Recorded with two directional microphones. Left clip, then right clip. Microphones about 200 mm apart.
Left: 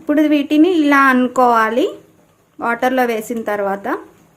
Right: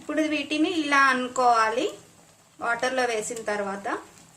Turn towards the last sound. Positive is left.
turn(degrees=50)  # may be behind; listen again after turning